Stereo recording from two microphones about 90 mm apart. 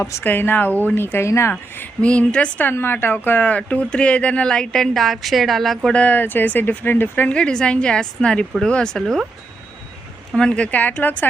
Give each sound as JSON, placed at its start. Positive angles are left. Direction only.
{"t": 0.0, "sound": "speech", "side_deg": 25}
{"t": 5.9, "sound": "speech", "side_deg": 15}
{"t": 10.3, "sound": "speech", "side_deg": 10}